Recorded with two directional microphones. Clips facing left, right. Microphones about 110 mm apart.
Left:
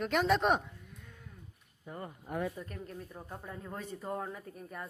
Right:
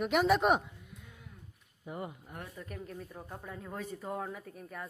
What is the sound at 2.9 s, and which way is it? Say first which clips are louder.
Speech: even; centre (ahead or behind).